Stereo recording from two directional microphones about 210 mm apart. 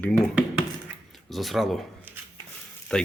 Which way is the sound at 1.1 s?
Centre (ahead or behind).